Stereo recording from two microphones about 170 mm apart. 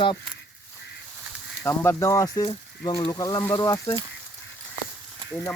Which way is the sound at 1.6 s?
15° left (ahead or behind).